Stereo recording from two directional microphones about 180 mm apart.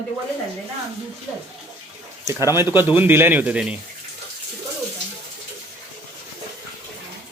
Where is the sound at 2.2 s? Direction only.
15° right (ahead or behind).